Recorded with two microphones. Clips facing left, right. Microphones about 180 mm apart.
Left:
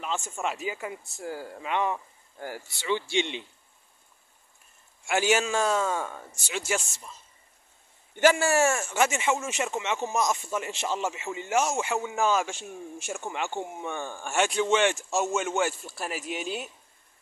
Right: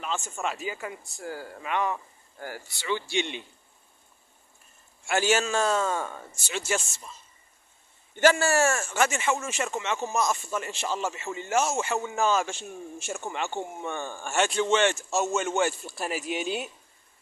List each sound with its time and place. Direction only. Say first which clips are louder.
0.4 s speech: left 1 dB; 15° left (ahead or behind)
5.0 s a man's voice: even; 15° left (ahead or behind)
8.2 s a man's voice: even; 15° left (ahead or behind); by 16.6 s centre (ahead or behind)